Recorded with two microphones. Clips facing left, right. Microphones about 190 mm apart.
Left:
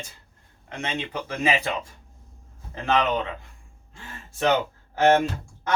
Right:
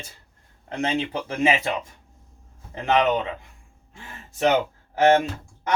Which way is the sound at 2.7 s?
20° right (ahead or behind).